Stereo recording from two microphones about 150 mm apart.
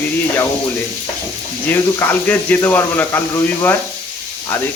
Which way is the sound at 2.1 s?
10° left (ahead or behind).